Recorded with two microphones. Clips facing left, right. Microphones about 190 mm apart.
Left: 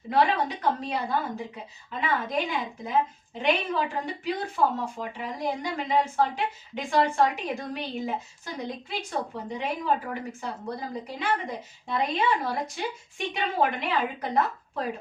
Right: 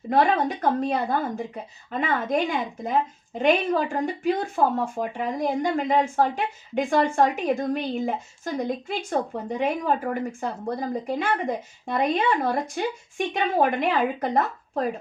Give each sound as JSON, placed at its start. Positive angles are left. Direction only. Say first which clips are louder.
{"t": 0.1, "sound": "speech", "louder": "right 3 dB", "side_deg": -50}